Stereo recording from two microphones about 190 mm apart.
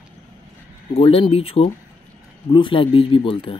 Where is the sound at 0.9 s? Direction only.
30° left (ahead or behind).